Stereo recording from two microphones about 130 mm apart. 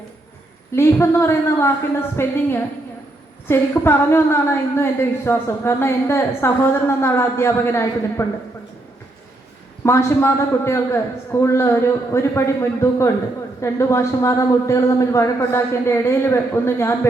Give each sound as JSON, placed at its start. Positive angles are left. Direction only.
{"t": 0.7, "sound": "a woman's voice", "side_deg": 20}
{"t": 9.8, "sound": "a woman's voice", "side_deg": 20}